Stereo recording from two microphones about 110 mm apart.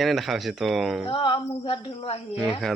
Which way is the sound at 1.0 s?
50° left (ahead or behind).